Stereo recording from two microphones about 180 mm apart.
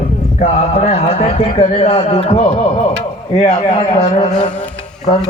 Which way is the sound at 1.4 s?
30° left (ahead or behind).